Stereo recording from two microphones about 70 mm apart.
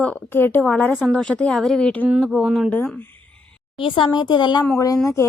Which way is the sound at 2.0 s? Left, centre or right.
Centre.